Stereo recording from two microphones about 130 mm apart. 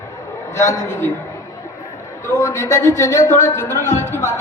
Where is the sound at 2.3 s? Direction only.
25° left (ahead or behind).